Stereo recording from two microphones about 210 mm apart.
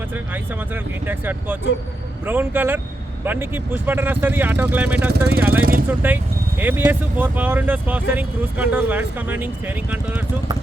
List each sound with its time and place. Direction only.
1.0 s speech: 10° right (ahead or behind)
5.1 s speech: 50° right (ahead or behind)
5.4 s speech: 10° right (ahead or behind)